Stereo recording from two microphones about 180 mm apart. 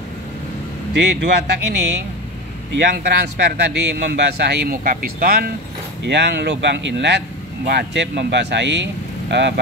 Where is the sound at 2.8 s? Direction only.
70° right (ahead or behind); by 5.5 s 55° right (ahead or behind).